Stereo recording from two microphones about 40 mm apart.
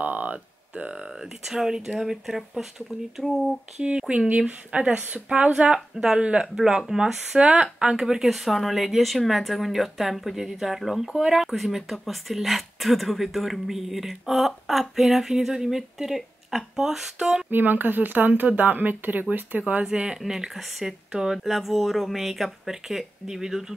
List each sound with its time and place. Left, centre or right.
0.0 s a sound: right
0.9 s speech: centre
4.4 s speech: right
5.9 s speech: right
7.3 s speech: right
8.3 s speech: centre
17.5 s speech: right
19.8 s speech: centre